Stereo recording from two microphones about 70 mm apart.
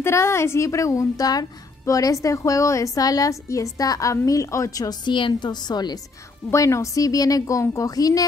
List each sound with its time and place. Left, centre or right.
0.0 s a woman's voice: left
6.5 s a woman's voice: left